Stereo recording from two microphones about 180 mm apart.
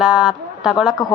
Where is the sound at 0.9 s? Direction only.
20° left (ahead or behind).